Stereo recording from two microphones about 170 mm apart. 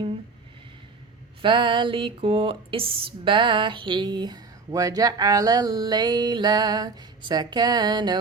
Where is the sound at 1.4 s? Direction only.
30° right (ahead or behind).